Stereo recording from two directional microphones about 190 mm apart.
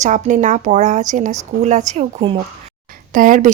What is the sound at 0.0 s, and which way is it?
Speech, 40° right (ahead or behind).